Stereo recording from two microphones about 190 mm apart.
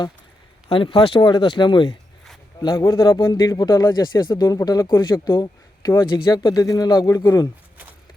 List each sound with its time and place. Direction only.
0.7 s speech: 25° left (ahead or behind)